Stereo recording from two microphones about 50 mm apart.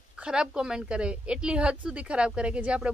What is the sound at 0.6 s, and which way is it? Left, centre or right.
A woman's voice, centre.